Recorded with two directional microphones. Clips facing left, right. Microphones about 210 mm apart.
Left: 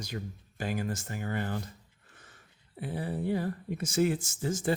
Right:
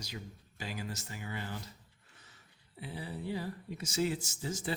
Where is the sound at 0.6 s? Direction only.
50° left (ahead or behind).